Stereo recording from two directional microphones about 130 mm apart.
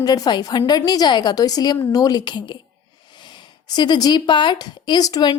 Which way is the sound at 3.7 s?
35° left (ahead or behind).